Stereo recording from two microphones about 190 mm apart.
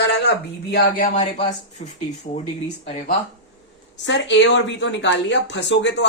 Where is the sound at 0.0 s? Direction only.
65° left (ahead or behind).